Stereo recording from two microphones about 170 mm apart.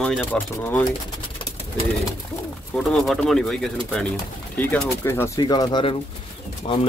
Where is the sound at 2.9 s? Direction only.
Centre (ahead or behind); by 6.8 s 35° left (ahead or behind).